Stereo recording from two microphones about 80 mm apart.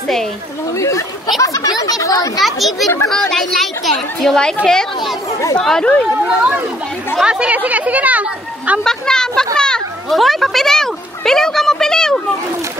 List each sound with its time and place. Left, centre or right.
0.7 s speech: left
2.4 s speech: centre
6.2 s speech: centre
8.8 s speech: centre
9.6 s children playing: centre